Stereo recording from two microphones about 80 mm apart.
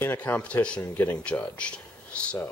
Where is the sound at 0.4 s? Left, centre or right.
Centre.